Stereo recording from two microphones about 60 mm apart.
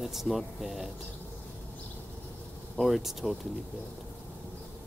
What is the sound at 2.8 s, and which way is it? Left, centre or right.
Speech, centre.